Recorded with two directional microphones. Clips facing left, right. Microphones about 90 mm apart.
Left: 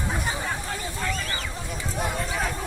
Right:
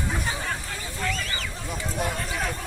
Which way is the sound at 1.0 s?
30° left (ahead or behind).